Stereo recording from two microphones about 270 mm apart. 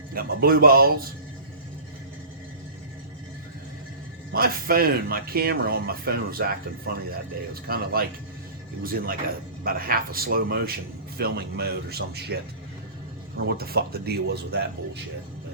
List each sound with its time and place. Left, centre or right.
0.1 s speech: right
4.3 s speech: right